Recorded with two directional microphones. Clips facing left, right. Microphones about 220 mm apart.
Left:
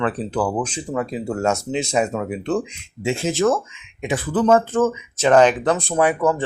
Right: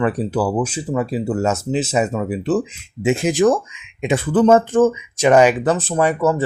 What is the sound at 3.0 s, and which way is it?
Speech, 15° right (ahead or behind).